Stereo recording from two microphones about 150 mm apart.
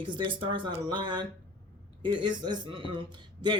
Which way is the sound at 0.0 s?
35° right (ahead or behind).